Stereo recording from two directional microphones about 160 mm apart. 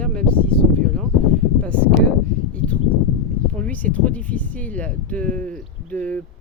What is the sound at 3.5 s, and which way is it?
Speech, 10° left (ahead or behind).